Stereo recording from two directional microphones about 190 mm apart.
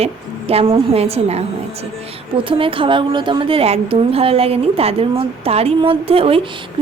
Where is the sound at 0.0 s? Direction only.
30° right (ahead or behind).